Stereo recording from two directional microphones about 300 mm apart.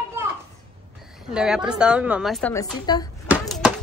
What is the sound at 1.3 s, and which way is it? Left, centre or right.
A woman's voice, centre.